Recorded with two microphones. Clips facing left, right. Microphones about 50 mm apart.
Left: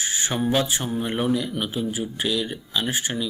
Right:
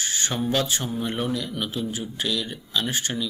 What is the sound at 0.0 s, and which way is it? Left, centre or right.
Speech, centre.